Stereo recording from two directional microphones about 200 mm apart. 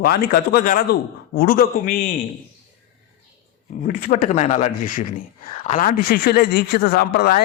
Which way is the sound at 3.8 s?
40° left (ahead or behind).